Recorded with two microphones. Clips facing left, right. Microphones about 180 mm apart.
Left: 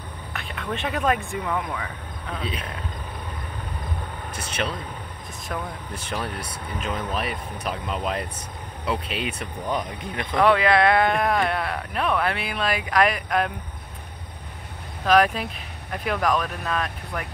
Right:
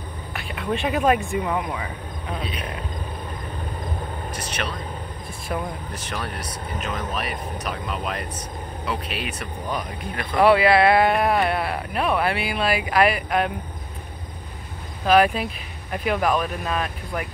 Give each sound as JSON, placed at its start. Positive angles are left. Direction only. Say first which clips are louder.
{"t": 0.6, "sound": "speech", "louder": "right 4 dB", "side_deg": -10}
{"t": 6.8, "sound": "speech", "louder": "left 1 dB", "side_deg": 30}
{"t": 10.3, "sound": "speech", "louder": "right 3 dB", "side_deg": -5}
{"t": 15.0, "sound": "speech", "louder": "right 2 dB", "side_deg": -5}